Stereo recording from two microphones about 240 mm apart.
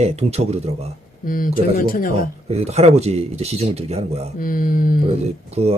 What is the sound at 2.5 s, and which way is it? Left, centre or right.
Speech, right.